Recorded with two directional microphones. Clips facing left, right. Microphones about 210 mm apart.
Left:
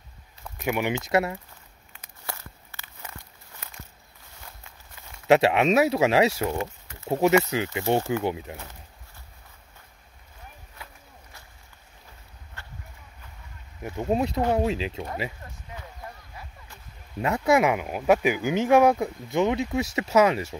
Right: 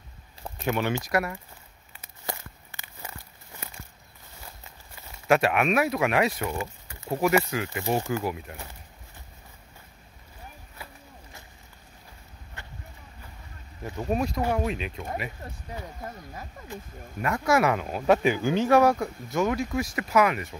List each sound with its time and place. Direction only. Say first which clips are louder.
0.6 s speech: left 1 dB; 15° left (ahead or behind)
2.2 s walk: right 3 dB; 15° right (ahead or behind)
5.3 s speech: left 3 dB; 25° left (ahead or behind)
12.6 s horse: right 1 dB; 15° right (ahead or behind)
13.8 s speech: left 2 dB; 20° left (ahead or behind)
17.2 s speech: left 2 dB; 20° left (ahead or behind)